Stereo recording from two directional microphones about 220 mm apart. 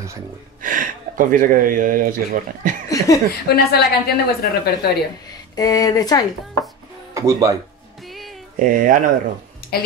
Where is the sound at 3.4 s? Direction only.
45° left (ahead or behind).